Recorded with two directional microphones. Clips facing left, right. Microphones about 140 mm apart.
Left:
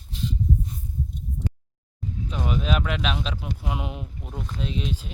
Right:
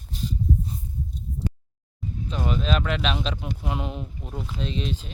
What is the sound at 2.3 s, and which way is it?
Speech, 5° left (ahead or behind).